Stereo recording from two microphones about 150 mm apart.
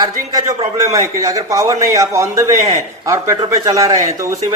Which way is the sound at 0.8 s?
20° right (ahead or behind).